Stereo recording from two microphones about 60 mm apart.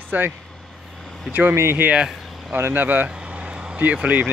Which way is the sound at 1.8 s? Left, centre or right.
Right.